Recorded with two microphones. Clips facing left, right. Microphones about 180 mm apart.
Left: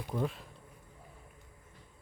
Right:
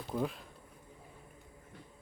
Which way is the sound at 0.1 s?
Centre (ahead or behind).